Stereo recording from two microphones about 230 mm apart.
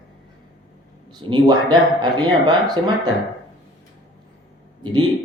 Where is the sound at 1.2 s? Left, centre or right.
Centre.